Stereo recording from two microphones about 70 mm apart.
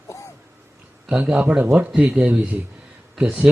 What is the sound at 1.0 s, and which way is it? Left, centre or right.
Speech, centre.